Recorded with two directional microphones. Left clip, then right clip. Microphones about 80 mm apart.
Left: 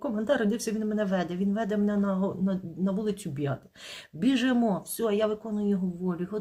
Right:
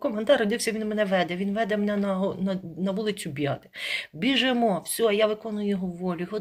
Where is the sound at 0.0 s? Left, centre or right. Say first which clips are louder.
Right 5 dB; left.